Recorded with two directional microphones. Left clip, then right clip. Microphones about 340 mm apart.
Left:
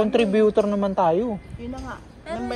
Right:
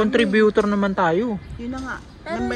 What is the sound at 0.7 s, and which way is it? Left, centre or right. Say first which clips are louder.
Speech: right 1 dB; centre.